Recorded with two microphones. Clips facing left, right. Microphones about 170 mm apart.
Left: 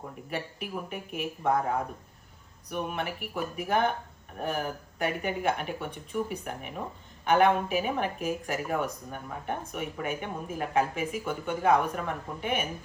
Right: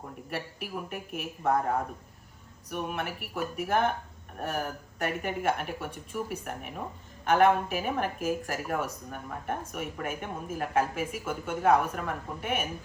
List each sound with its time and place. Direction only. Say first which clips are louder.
0.3 s speech: left 1 dB; centre (ahead or behind)